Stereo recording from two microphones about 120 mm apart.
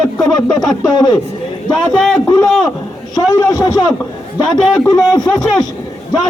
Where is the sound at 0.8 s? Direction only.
35° left (ahead or behind).